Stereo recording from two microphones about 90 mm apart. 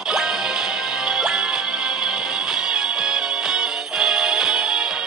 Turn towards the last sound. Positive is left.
turn(degrees=-5)  # may be behind; listen again after turning